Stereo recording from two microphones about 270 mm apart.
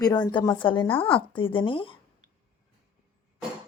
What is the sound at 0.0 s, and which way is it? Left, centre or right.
Speech, centre.